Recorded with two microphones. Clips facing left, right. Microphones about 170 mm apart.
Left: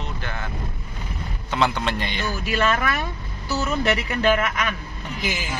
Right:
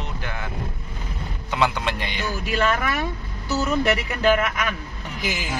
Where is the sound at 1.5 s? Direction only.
10° right (ahead or behind).